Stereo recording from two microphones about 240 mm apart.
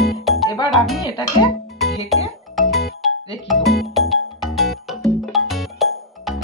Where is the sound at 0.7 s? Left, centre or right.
Centre.